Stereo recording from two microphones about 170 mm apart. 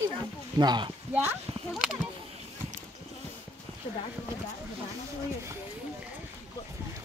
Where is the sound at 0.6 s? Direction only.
25° right (ahead or behind).